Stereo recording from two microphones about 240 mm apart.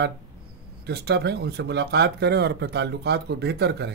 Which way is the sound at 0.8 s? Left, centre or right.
Right.